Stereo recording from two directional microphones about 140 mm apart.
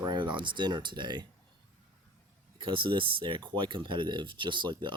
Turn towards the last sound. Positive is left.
turn(degrees=-35)  # may be behind; listen again after turning